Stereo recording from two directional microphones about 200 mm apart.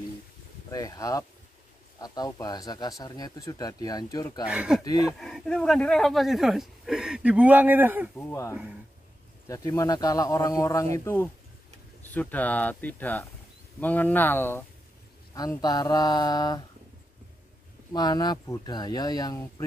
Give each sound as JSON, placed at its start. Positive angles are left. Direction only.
{"t": 0.7, "sound": "speech", "side_deg": 15}
{"t": 4.5, "sound": "speech", "side_deg": -5}
{"t": 4.8, "sound": "speech", "side_deg": 20}
{"t": 5.2, "sound": "speech", "side_deg": 0}
{"t": 8.2, "sound": "speech", "side_deg": 15}
{"t": 12.0, "sound": "speech", "side_deg": 10}
{"t": 17.9, "sound": "speech", "side_deg": 20}